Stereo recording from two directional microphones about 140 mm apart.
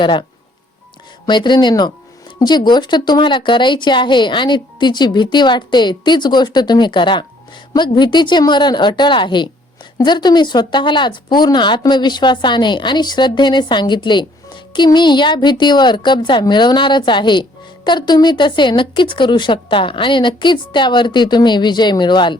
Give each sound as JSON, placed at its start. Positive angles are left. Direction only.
{"t": 0.0, "sound": "speech", "side_deg": 35}
{"t": 1.3, "sound": "speech", "side_deg": 30}